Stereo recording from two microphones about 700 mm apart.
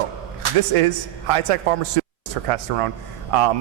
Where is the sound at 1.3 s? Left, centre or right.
Right.